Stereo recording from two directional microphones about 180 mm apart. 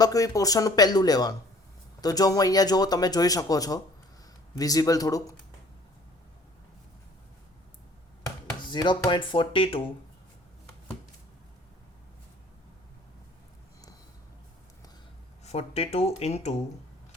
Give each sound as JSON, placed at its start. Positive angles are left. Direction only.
{"t": 0.0, "sound": "speech", "side_deg": 20}
{"t": 8.6, "sound": "speech", "side_deg": 25}
{"t": 15.4, "sound": "speech", "side_deg": 35}